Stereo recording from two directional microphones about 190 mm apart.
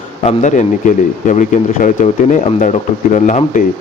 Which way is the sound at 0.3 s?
40° left (ahead or behind).